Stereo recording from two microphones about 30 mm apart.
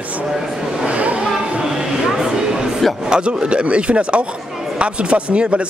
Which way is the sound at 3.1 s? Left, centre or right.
Right.